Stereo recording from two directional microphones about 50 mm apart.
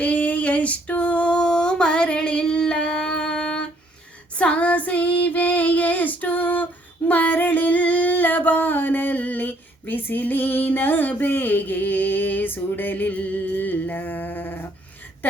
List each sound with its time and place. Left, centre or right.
0.0 s female singing: left